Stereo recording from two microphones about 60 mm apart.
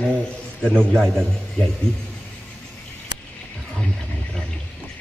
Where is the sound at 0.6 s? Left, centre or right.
Centre.